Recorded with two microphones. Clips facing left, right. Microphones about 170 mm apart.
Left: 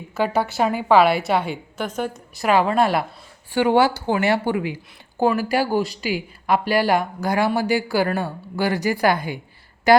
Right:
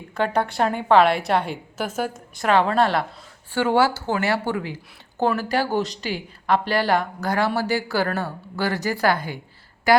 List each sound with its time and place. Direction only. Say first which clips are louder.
0.1 s a woman's voice: left 1 dB; 5° left (ahead or behind)
2.3 s a woman's voice: left 1 dB; 5° left (ahead or behind); by 10.0 s 20° left (ahead or behind)